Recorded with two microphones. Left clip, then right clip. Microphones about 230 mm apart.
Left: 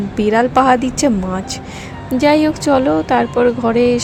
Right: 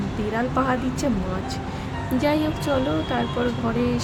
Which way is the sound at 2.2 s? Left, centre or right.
Left.